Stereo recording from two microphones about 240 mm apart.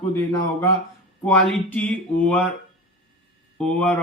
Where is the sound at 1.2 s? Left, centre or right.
Centre.